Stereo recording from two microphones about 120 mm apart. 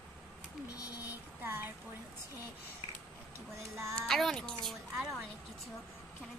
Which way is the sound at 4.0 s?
5° left (ahead or behind).